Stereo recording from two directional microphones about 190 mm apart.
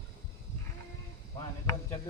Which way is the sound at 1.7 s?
25° left (ahead or behind).